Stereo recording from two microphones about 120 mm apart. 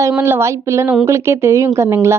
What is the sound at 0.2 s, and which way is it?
A woman's voice, 20° right (ahead or behind).